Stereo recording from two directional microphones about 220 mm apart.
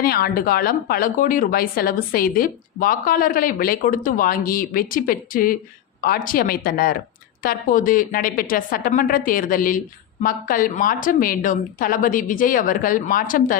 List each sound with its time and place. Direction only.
0.0 s a woman's voice: 45° left (ahead or behind)